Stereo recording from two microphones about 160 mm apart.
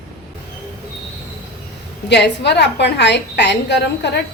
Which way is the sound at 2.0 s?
90° left.